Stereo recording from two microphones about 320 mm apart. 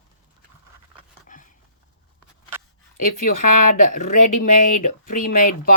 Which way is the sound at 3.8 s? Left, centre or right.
Left.